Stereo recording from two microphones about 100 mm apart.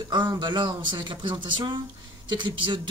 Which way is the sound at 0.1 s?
45° right (ahead or behind).